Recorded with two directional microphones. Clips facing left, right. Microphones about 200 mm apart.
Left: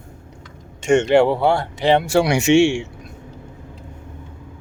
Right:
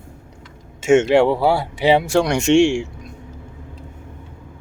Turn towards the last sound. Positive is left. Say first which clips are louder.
# right 1 dB
turn(degrees=5)  # may be behind; listen again after turning